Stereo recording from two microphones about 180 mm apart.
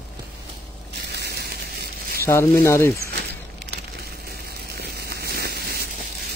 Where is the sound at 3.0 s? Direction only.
65° right (ahead or behind).